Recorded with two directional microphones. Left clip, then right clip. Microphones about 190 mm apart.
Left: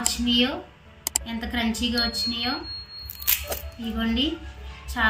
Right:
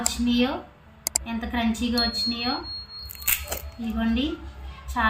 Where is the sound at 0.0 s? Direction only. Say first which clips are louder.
Left 2 dB; 5° right (ahead or behind).